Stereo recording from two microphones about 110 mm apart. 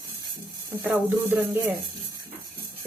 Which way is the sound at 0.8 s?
15° right (ahead or behind).